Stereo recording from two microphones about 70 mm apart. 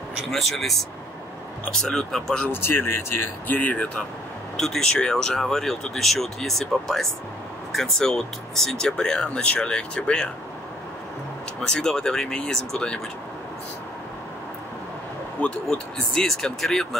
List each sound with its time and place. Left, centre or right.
0.3 s speech: centre
2.5 s speech: left
4.6 s speech: centre
11.6 s speech: centre
15.4 s speech: left
16.1 s speech: centre